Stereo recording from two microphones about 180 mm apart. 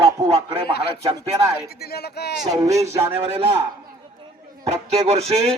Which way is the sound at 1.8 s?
65° left (ahead or behind).